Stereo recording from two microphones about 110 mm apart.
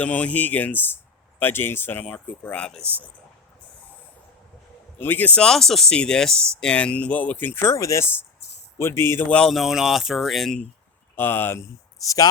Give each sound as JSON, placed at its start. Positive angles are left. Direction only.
{"t": 0.0, "sound": "speech", "side_deg": 10}
{"t": 4.9, "sound": "speech", "side_deg": 15}
{"t": 9.3, "sound": "speech", "side_deg": 5}
{"t": 11.2, "sound": "speech", "side_deg": 20}